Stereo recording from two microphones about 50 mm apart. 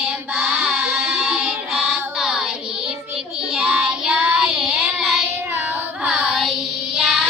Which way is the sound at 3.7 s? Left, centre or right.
Right.